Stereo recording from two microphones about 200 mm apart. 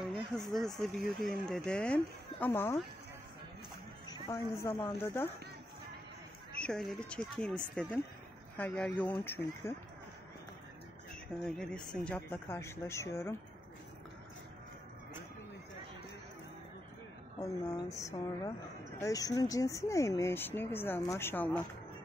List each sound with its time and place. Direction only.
0.0 s speech: centre (ahead or behind)
4.1 s speech: 15° left (ahead or behind)
6.5 s speech: 5° left (ahead or behind)
11.4 s speech: 5° left (ahead or behind)
17.4 s speech: 15° left (ahead or behind)